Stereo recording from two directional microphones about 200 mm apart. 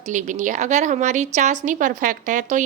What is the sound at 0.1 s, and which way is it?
A woman's voice, 40° right (ahead or behind).